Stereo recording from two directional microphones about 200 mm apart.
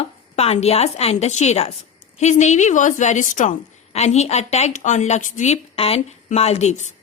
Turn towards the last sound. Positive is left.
turn(degrees=35)  # may be behind; listen again after turning